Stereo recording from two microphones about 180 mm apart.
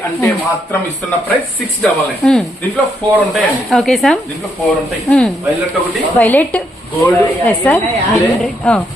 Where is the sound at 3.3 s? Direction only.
Centre (ahead or behind).